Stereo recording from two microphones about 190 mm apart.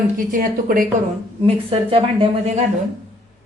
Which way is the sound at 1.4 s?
30° right (ahead or behind).